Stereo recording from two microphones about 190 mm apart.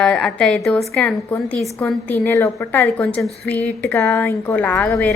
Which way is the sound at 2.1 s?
15° left (ahead or behind).